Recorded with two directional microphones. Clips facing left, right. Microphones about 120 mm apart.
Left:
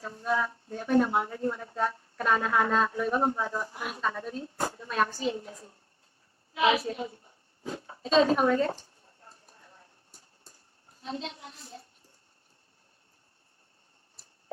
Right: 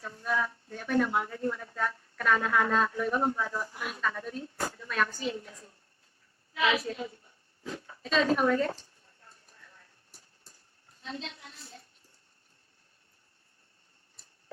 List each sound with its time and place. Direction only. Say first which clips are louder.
0.0 s a woman's voice: left 2 dB; 25° left (ahead or behind)
9.2 s clip-clop: left 3 dB; 25° left (ahead or behind)
11.0 s speech: left 4 dB; 25° left (ahead or behind)